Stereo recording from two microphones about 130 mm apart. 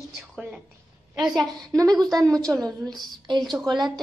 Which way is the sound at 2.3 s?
5° left (ahead or behind).